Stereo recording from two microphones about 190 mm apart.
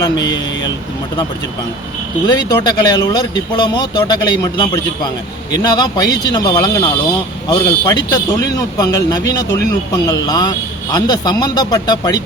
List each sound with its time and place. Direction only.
0.0 s speech: 20° left (ahead or behind)
2.2 s speech: 20° left (ahead or behind)